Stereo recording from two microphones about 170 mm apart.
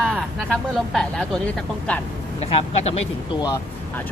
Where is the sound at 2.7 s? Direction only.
40° left (ahead or behind).